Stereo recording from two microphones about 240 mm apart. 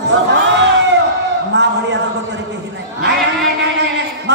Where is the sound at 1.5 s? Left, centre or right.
Right.